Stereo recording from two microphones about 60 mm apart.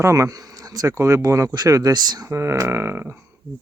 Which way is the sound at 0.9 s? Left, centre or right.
Right.